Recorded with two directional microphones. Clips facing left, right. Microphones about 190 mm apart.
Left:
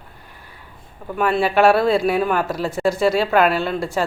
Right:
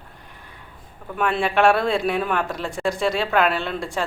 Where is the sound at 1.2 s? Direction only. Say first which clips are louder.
Left 3 dB; 5° left (ahead or behind).